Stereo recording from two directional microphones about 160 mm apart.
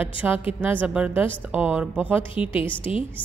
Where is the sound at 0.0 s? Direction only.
10° right (ahead or behind).